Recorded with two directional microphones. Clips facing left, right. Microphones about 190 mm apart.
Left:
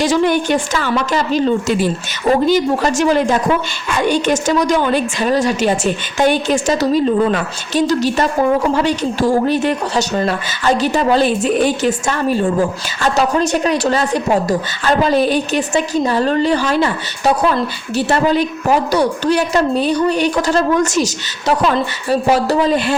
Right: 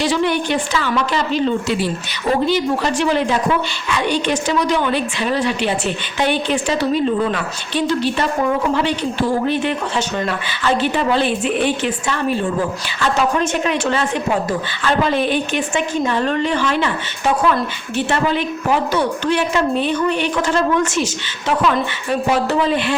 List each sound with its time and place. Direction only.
0.0 s a woman's voice: 45° left (ahead or behind)